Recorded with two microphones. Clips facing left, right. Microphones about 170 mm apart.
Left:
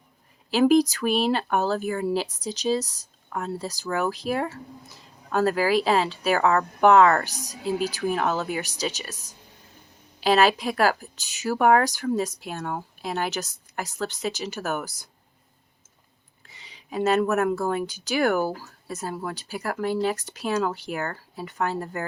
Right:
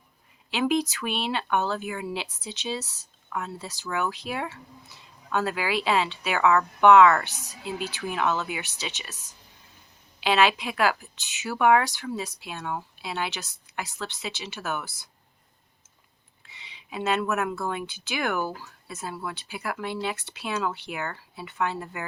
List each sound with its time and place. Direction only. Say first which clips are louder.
0.5 s a woman's voice: left 7 dB; 40° left (ahead or behind)
16.5 s speech: left 4 dB; 40° left (ahead or behind)